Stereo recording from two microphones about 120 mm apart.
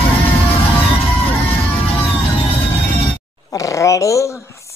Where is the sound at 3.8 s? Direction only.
25° left (ahead or behind).